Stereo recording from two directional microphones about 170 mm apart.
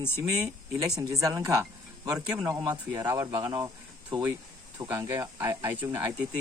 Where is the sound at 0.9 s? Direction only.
20° right (ahead or behind).